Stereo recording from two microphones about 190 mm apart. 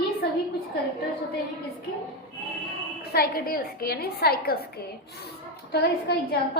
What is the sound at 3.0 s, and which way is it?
A woman's voice, 55° left (ahead or behind).